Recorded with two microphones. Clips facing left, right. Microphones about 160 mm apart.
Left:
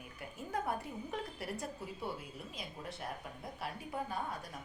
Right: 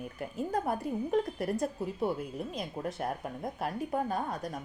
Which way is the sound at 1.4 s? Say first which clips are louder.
Right 10 dB; 45° right (ahead or behind).